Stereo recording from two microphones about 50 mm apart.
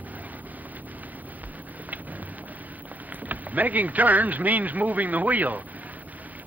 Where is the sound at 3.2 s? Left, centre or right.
Right.